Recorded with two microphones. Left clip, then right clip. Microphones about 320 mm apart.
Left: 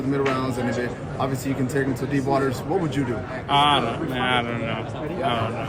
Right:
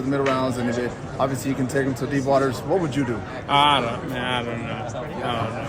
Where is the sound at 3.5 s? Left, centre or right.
Centre.